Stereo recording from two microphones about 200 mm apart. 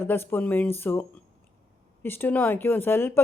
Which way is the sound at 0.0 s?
10° left (ahead or behind).